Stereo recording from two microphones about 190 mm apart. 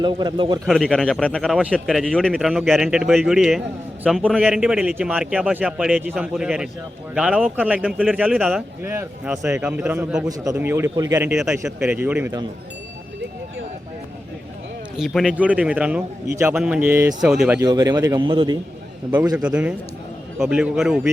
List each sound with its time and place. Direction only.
0.0 s a man's voice: 25° right (ahead or behind)
0.6 s a man's voice: centre (ahead or behind)
10.2 s a man's voice: 20° right (ahead or behind)
11.3 s a man's voice: 5° right (ahead or behind)
14.9 s a man's voice: centre (ahead or behind)
17.6 s a man's voice: 20° right (ahead or behind)
19.1 s a man's voice: 5° right (ahead or behind)